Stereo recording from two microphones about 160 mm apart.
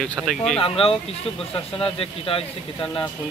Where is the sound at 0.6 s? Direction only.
35° left (ahead or behind).